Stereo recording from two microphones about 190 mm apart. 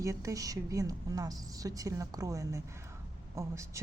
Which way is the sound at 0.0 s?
15° right (ahead or behind).